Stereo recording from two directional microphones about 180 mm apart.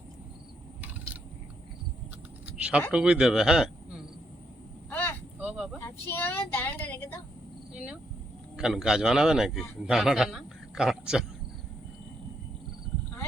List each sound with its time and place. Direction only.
2.6 s speech: 5° right (ahead or behind)
4.9 s vehicle: 10° left (ahead or behind)
5.4 s vehicle: 5° right (ahead or behind)
5.8 s a sound: 10° left (ahead or behind)
8.5 s a man's voice: 5° right (ahead or behind)